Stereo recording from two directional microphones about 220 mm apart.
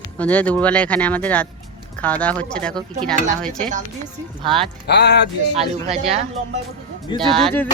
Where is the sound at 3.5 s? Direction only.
35° right (ahead or behind).